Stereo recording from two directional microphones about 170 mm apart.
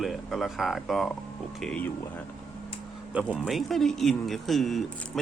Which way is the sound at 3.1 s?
5° right (ahead or behind).